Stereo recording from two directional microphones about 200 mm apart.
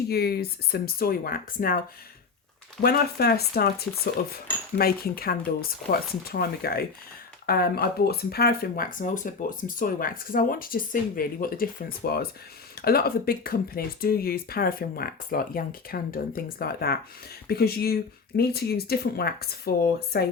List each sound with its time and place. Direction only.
0.1 s speech: 50° left (ahead or behind)
2.8 s speech: 50° left (ahead or behind)